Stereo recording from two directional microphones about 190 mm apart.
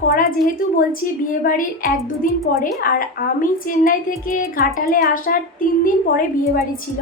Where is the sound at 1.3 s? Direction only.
45° left (ahead or behind).